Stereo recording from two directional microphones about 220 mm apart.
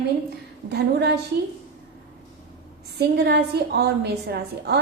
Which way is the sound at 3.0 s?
50° right (ahead or behind).